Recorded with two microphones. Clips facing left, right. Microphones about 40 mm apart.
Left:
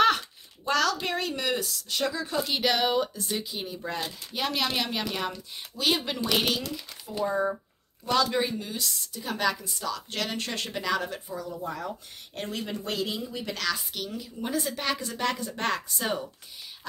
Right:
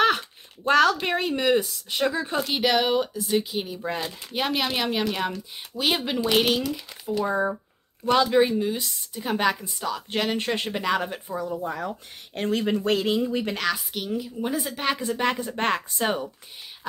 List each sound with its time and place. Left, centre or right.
0.7 s speech: right
2.5 s speech: centre
3.8 s speech: right
12.4 s speech: right
13.9 s speech: centre